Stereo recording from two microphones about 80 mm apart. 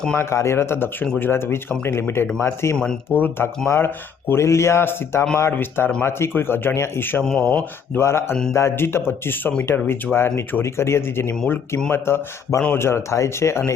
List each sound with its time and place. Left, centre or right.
0.2 s speech: left
7.3 s speech: centre
7.9 s speech: left